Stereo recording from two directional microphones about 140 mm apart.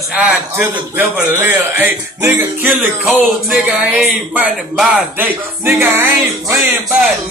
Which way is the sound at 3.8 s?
10° right (ahead or behind).